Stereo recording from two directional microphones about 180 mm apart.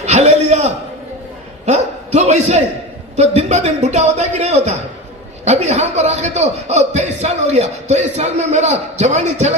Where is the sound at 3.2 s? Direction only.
40° right (ahead or behind).